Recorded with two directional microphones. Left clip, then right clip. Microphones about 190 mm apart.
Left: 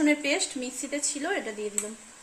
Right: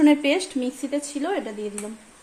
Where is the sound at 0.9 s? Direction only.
15° right (ahead or behind).